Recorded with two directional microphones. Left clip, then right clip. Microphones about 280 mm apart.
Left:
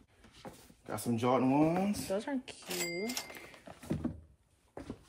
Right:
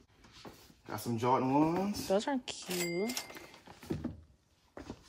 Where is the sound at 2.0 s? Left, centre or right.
Centre.